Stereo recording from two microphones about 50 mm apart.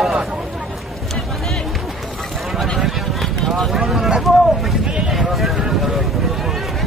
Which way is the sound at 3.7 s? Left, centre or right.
Centre.